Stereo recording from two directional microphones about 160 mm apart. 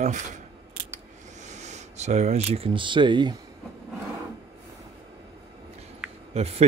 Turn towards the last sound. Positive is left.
turn(degrees=-40)  # may be behind; listen again after turning